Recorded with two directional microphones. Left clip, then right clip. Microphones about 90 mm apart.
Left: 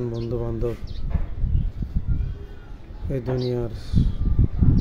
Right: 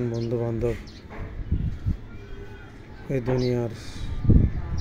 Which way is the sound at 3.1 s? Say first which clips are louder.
Right 1 dB; 20° left (ahead or behind).